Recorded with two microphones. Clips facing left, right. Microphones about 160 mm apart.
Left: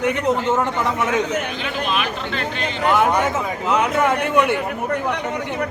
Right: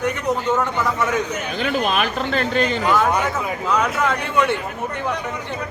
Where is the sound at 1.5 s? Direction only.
45° right (ahead or behind).